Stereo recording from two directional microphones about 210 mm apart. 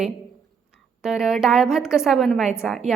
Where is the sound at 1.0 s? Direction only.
Centre (ahead or behind).